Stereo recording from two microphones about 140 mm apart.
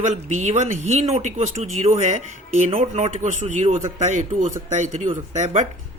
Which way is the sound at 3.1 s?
60° right (ahead or behind).